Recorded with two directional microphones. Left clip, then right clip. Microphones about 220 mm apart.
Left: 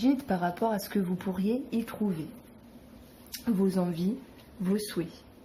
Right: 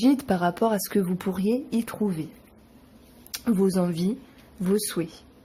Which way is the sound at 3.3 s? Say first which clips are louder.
Right 6 dB; 50° right (ahead or behind).